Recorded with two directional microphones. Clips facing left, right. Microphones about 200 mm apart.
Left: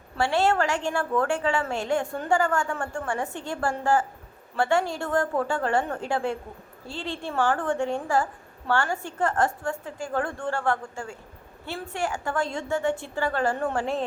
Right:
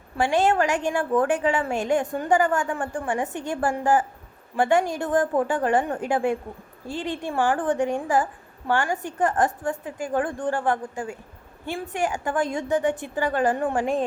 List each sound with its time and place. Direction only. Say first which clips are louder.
0.2 s a woman's voice: right 2 dB; 15° right (ahead or behind)